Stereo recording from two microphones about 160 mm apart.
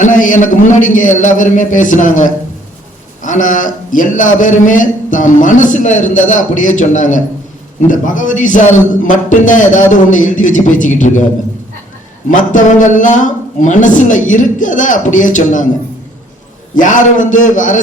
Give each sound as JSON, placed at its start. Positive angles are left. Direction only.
{"t": 0.0, "sound": "a man's voice", "side_deg": 55}
{"t": 12.3, "sound": "a man's voice", "side_deg": 50}
{"t": 16.7, "sound": "a man's voice", "side_deg": 55}